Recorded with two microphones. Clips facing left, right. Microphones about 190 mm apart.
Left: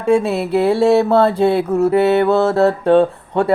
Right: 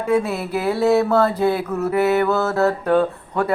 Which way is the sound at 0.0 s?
25° left (ahead or behind).